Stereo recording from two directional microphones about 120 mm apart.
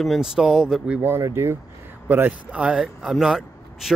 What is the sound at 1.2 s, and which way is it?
Speech, 20° right (ahead or behind).